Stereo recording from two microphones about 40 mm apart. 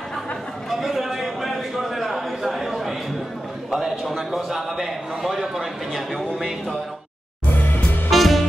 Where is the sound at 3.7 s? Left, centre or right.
Centre.